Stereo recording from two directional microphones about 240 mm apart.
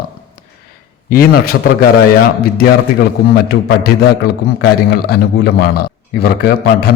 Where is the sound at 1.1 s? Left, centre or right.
Left.